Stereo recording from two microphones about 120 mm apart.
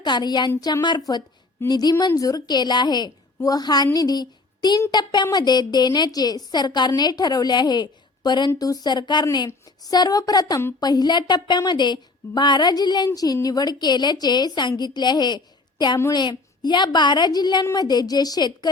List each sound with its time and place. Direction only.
0.0 s a woman's voice: 35° left (ahead or behind)
3.9 s a sound: 35° left (ahead or behind)
4.9 s a woman's voice: 35° left (ahead or behind)
16.6 s a woman's voice: 40° left (ahead or behind)